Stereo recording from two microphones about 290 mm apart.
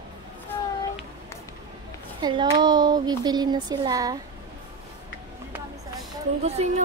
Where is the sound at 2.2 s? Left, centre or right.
Centre.